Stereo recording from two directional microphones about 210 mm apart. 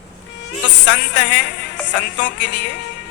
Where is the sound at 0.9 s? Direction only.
55° left (ahead or behind).